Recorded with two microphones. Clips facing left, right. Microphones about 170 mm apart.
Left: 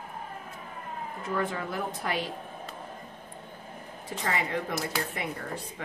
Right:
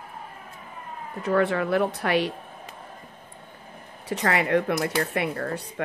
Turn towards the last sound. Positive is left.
turn(degrees=-70)  # may be behind; listen again after turning